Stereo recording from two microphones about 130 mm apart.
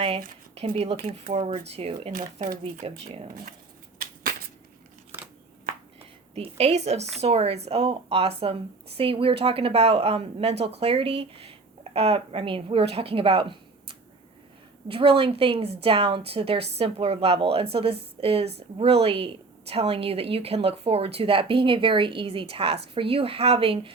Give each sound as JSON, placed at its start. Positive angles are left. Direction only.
{"t": 0.5, "sound": "a woman's voice", "side_deg": -50}
{"t": 2.1, "sound": "speech", "side_deg": -90}
{"t": 2.8, "sound": "a woman's voice", "side_deg": -50}
{"t": 3.9, "sound": "a sound", "side_deg": -90}
{"t": 6.3, "sound": "a woman's voice", "side_deg": -55}